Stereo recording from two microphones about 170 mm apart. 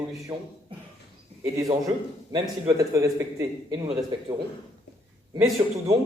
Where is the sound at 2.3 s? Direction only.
20° right (ahead or behind).